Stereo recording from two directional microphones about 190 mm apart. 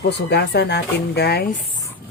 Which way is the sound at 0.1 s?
60° left (ahead or behind).